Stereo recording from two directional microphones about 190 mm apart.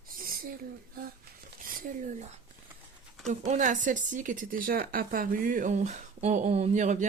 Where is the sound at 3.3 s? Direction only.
35° right (ahead or behind).